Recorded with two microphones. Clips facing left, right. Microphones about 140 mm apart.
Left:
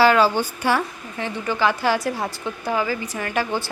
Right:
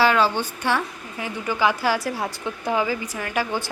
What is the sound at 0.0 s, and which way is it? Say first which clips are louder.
Speech: left 3 dB; 5° left (ahead or behind).